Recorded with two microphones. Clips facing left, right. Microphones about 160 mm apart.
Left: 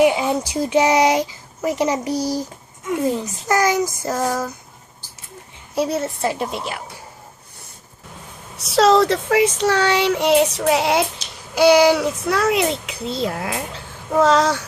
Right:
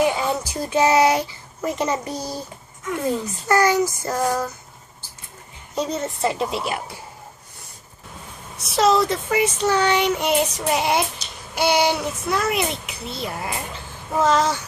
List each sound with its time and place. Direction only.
0.0 s speech: 15° left (ahead or behind)
5.7 s a woman's voice: 5° left (ahead or behind)
8.7 s speech: 90° left
9.6 s child singing: 75° left (ahead or behind)
11.6 s a child's voice: 90° left